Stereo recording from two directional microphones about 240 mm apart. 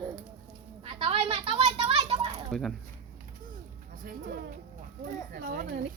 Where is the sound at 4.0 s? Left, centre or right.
Right.